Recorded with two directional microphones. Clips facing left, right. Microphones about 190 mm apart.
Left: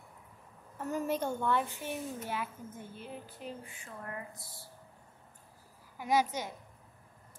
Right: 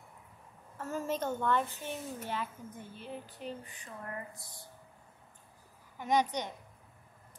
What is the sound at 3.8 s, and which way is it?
Speech, centre (ahead or behind).